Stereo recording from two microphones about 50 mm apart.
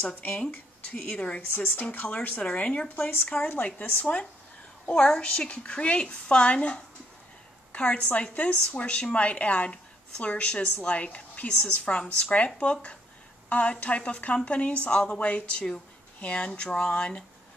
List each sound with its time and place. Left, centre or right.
0.0 s speech: left
1.1 s a woman's voice: left
1.4 s a woman's voice: left; by 17.2 s centre